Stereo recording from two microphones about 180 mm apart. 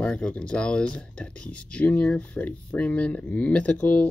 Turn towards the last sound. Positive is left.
turn(degrees=10)  # may be behind; listen again after turning